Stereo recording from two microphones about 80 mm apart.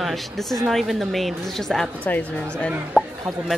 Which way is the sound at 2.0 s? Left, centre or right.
Centre.